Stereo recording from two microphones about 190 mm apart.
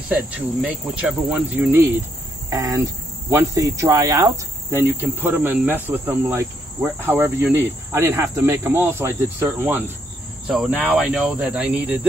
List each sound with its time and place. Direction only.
0.1 s cricket: 5° right (ahead or behind)
2.5 s speech: 15° right (ahead or behind)
5.0 s cricket: 10° right (ahead or behind)
10.4 s speech: 5° right (ahead or behind)